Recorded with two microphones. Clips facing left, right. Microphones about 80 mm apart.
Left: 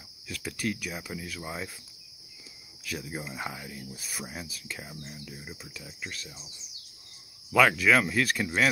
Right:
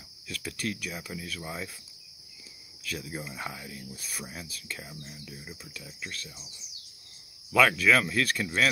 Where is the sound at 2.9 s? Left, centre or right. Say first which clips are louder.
Left 1 dB; centre.